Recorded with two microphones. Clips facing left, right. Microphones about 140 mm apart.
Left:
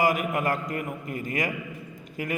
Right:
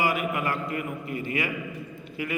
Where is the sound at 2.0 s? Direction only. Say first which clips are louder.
Left 1 dB; 45° left (ahead or behind).